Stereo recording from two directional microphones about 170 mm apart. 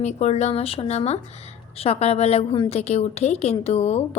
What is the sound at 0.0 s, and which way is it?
A woman's voice, 40° left (ahead or behind).